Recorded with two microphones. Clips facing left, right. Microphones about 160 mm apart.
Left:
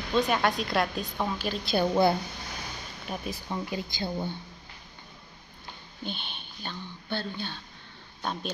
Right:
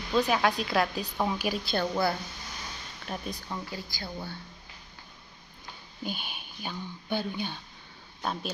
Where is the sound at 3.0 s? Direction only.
5° left (ahead or behind).